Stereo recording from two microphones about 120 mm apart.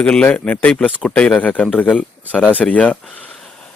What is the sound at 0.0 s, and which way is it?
Speech, 10° left (ahead or behind).